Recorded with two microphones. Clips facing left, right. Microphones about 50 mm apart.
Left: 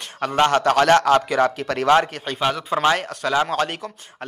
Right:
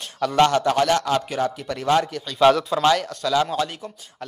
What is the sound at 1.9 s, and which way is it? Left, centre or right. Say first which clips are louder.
Speech: left 1 dB; left.